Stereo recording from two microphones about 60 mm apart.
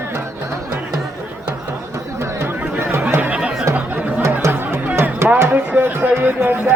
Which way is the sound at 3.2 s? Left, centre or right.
Centre.